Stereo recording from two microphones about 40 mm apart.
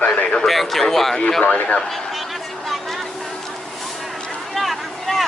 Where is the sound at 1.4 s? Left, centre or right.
Left.